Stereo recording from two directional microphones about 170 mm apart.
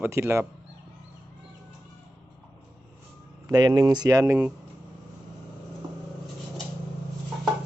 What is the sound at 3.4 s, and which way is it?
Speech, 25° right (ahead or behind).